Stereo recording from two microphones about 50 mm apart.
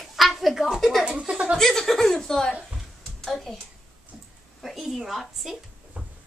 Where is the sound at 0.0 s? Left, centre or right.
Centre.